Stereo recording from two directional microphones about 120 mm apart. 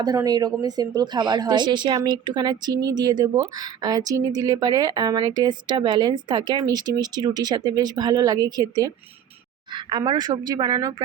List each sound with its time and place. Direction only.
0.0 s speech: 35° right (ahead or behind)